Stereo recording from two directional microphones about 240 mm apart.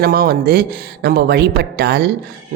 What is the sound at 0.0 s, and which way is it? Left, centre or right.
Speech, right.